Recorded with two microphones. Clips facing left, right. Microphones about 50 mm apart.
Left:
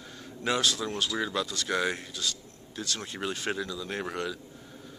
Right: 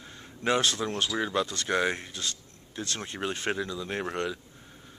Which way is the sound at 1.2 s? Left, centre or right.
Right.